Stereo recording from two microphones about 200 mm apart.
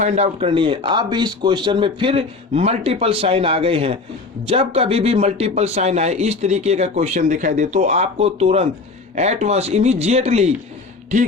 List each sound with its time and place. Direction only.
0.0 s a man's voice: 35° right (ahead or behind)